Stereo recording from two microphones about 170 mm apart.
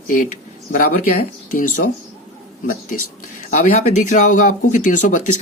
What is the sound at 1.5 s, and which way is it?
Speech, 50° left (ahead or behind).